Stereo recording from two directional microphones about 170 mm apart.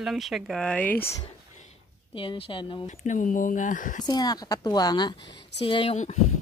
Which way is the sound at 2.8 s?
45° left (ahead or behind).